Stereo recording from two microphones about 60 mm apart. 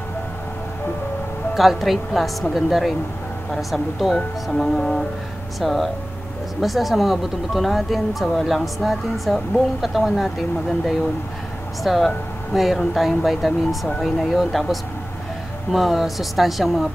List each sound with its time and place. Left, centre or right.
1.5 s speech: centre
11.8 s speech: centre